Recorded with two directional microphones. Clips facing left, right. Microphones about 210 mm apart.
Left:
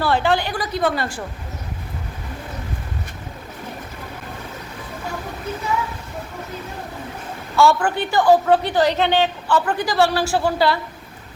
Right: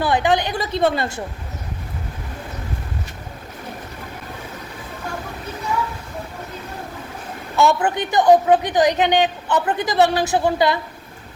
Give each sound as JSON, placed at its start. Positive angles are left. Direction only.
{"t": 0.0, "sound": "a woman's voice", "side_deg": -15}
{"t": 7.5, "sound": "a woman's voice", "side_deg": -20}